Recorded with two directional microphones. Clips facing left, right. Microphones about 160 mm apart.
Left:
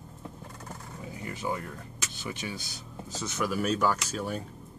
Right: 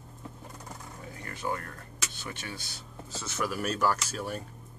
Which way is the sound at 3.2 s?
Centre (ahead or behind).